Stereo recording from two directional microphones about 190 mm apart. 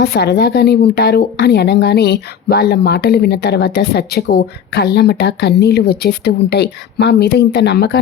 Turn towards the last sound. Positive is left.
turn(degrees=60)  # may be behind; listen again after turning